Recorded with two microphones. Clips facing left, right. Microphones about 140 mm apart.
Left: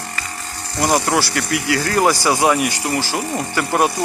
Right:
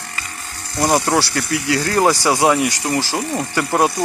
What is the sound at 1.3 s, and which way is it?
Speech, 30° right (ahead or behind).